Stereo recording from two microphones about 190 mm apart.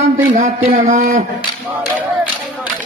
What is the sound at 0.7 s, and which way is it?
Speech, 40° right (ahead or behind).